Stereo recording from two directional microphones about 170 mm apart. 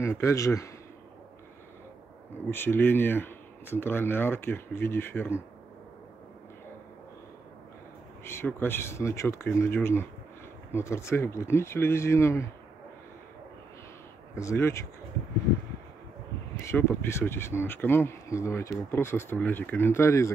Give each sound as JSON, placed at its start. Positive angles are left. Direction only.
{"t": 0.0, "sound": "speech", "side_deg": 15}
{"t": 2.5, "sound": "speech", "side_deg": 10}
{"t": 8.2, "sound": "speech", "side_deg": 15}
{"t": 14.3, "sound": "speech", "side_deg": 15}
{"t": 16.6, "sound": "speech", "side_deg": 15}